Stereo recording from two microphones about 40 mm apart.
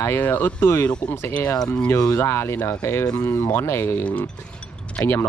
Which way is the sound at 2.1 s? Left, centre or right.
Left.